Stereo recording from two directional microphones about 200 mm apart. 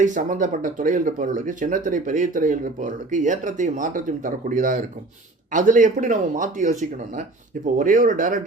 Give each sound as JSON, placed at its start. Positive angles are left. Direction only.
{"t": 0.0, "sound": "speech", "side_deg": -40}